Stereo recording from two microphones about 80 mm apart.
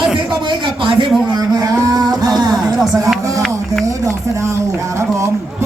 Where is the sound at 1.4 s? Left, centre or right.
Right.